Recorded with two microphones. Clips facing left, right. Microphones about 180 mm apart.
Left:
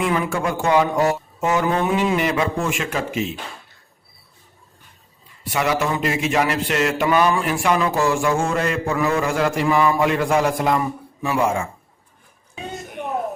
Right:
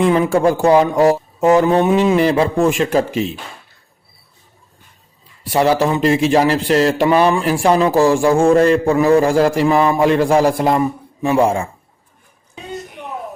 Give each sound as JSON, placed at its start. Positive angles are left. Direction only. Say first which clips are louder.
{"t": 0.0, "sound": "speech", "louder": "right 8 dB", "side_deg": -30}
{"t": 5.4, "sound": "speech", "louder": "right 7 dB", "side_deg": -30}